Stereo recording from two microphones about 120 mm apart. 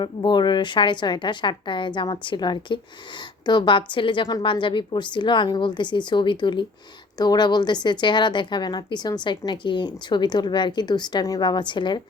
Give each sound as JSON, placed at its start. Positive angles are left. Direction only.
{"t": 0.0, "sound": "a woman's voice", "side_deg": 40}